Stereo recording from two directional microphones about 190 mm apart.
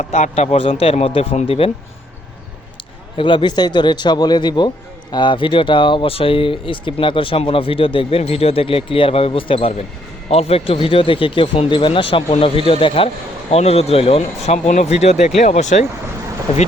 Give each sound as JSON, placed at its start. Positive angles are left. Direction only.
{"t": 0.0, "sound": "speech", "side_deg": 35}
{"t": 3.2, "sound": "speech", "side_deg": 25}